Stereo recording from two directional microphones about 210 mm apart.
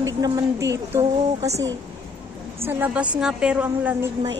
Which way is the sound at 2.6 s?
10° right (ahead or behind).